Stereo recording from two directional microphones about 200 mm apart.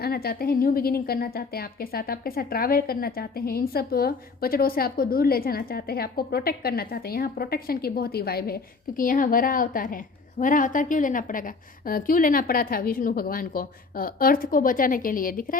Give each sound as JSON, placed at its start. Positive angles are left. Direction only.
{"t": 0.0, "sound": "a woman's voice", "side_deg": 50}